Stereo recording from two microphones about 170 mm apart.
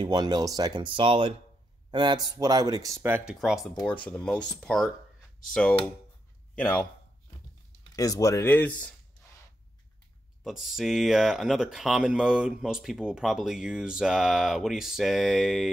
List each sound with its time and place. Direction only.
0.0 s speech: 25° right (ahead or behind)
3.8 s speech: 5° left (ahead or behind)
7.9 s speech: 20° left (ahead or behind)
10.4 s speech: centre (ahead or behind)